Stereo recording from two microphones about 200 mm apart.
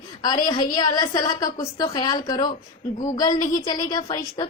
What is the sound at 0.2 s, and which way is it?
A woman's voice, 20° left (ahead or behind).